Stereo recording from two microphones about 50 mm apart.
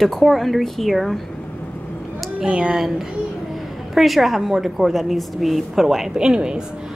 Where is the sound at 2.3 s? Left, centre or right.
Centre.